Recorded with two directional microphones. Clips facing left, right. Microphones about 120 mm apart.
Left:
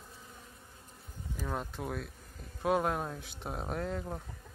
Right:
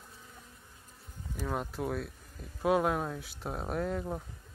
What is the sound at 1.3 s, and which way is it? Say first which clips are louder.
Speech: right 2 dB; 5° right (ahead or behind).